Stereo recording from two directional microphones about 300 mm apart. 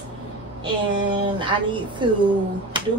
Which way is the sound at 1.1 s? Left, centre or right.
Centre.